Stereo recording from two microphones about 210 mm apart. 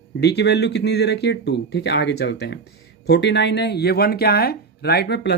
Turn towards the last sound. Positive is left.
turn(degrees=55)  # may be behind; listen again after turning